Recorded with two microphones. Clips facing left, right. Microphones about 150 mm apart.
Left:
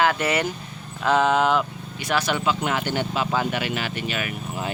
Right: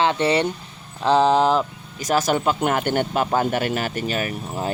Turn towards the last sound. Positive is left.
turn(degrees=-40)  # may be behind; listen again after turning